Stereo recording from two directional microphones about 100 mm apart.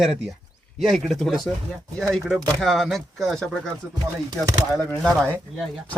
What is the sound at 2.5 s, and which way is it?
Speech, centre (ahead or behind).